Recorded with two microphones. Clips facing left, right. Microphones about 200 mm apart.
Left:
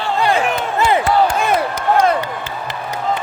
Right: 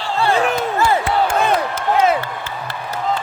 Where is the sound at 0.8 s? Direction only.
20° left (ahead or behind).